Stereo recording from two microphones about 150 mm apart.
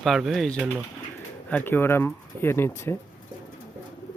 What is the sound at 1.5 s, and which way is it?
Speech, 15° left (ahead or behind).